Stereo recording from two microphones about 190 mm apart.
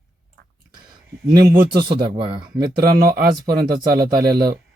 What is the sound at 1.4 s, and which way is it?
Speech, 50° right (ahead or behind).